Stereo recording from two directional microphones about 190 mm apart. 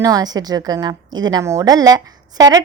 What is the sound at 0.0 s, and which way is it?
Speech, 20° right (ahead or behind).